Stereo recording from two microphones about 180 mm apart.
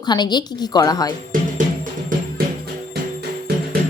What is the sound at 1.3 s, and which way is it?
Music, 50° right (ahead or behind).